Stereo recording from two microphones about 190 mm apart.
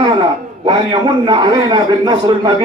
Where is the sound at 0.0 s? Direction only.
25° right (ahead or behind).